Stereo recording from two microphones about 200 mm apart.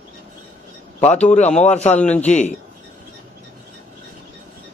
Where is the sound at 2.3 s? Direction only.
35° left (ahead or behind).